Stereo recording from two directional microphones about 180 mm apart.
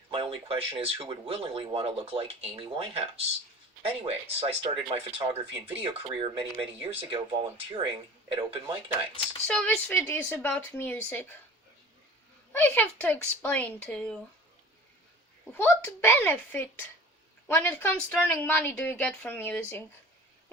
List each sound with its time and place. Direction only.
0.1 s speech: 30° right (ahead or behind)
9.5 s a woman's voice: 5° left (ahead or behind)
12.5 s a woman's voice: 10° left (ahead or behind)
15.5 s a woman's voice: 10° left (ahead or behind)